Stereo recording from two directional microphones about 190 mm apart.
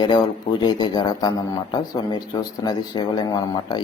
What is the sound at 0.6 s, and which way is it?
A man's voice, 20° left (ahead or behind).